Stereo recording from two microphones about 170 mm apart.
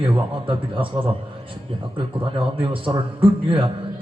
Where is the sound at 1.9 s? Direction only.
30° right (ahead or behind).